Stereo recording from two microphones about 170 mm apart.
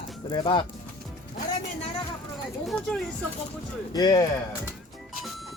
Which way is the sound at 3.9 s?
25° left (ahead or behind).